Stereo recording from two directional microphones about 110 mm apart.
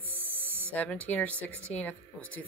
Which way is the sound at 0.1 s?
20° right (ahead or behind).